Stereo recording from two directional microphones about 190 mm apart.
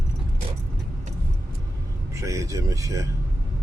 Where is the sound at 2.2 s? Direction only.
15° right (ahead or behind).